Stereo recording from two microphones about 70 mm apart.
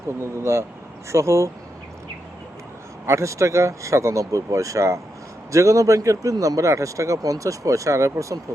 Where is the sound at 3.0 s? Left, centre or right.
Right.